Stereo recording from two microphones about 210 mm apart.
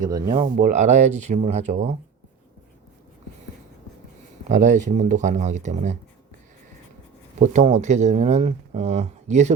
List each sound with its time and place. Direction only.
0.0 s speech: 20° right (ahead or behind)
0.4 s speech: 35° right (ahead or behind)
4.4 s speech: 35° right (ahead or behind)
7.3 s speech: 35° right (ahead or behind)